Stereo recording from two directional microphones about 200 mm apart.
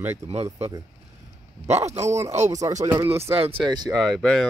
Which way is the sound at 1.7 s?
35° right (ahead or behind).